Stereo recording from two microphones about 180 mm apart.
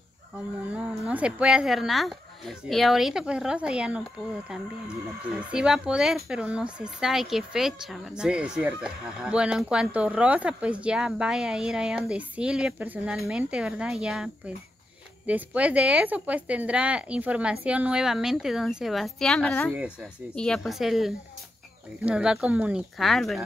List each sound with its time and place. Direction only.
0.7 s speech: 5° right (ahead or behind)
5.3 s speech: 5° right (ahead or behind)
19.7 s speech: 5° right (ahead or behind)
20.3 s speech: 5° left (ahead or behind)